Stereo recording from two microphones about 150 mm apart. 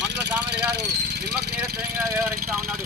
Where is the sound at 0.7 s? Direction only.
90° right.